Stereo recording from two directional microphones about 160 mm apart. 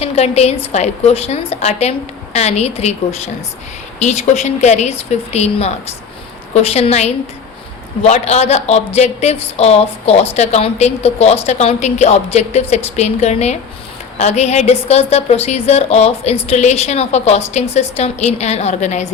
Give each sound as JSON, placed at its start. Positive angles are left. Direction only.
{"t": 0.0, "sound": "a woman's voice", "side_deg": 40}